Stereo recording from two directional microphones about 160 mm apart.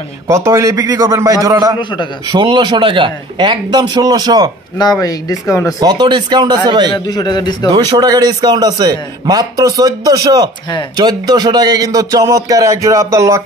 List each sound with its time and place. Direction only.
0.3 s a man's voice: 20° right (ahead or behind)
1.8 s speech: 30° left (ahead or behind)
2.2 s a man's voice: 30° right (ahead or behind)
5.0 s speech: 20° left (ahead or behind)
5.8 s a man's voice: 25° right (ahead or behind)
7.2 s speech: 25° left (ahead or behind)
7.7 s a man's voice: 25° right (ahead or behind)